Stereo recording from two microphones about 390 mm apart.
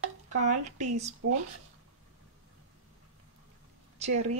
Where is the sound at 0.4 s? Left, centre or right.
Centre.